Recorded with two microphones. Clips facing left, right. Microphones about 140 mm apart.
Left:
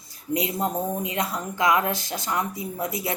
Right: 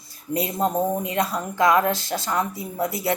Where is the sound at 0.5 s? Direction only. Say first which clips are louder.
Right 4 dB; 20° right (ahead or behind).